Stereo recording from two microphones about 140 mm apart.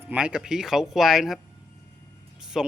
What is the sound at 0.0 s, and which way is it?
Speech, 10° right (ahead or behind).